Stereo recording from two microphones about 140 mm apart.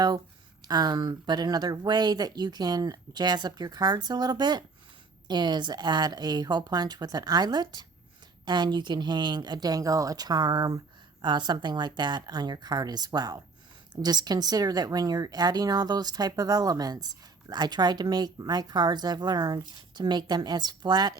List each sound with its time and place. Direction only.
0.7 s a woman's voice: 30° right (ahead or behind)